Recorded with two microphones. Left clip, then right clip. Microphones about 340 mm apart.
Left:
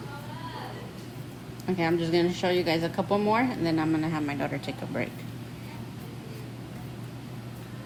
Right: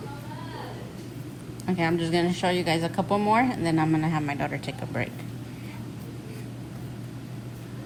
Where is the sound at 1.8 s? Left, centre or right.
Right.